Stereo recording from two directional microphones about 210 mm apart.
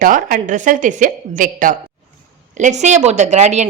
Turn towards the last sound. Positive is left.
turn(degrees=-35)  # may be behind; listen again after turning